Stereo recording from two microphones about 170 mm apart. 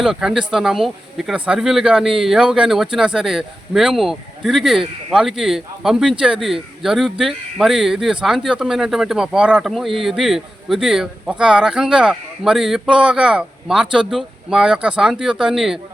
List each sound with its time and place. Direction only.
0.0 s a man's voice: centre (ahead or behind)